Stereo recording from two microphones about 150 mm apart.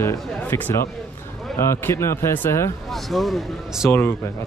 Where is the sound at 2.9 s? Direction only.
Centre (ahead or behind).